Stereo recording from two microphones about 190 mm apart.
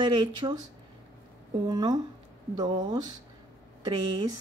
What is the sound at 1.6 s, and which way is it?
Speech, 20° right (ahead or behind).